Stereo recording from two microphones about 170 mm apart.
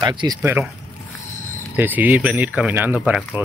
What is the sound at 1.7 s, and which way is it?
Speech, 10° right (ahead or behind).